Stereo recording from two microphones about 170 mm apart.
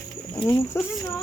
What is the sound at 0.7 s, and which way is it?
Speech, 15° left (ahead or behind).